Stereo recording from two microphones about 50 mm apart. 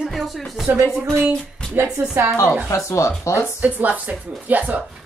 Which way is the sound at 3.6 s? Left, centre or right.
Right.